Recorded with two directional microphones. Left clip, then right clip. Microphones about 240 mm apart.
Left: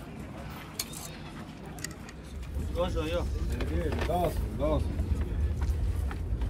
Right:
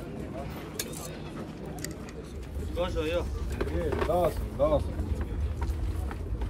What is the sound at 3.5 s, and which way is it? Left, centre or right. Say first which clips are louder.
Speech: right 4 dB; right.